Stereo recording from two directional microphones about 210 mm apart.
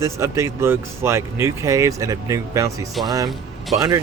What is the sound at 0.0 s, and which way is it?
Speech, 15° right (ahead or behind).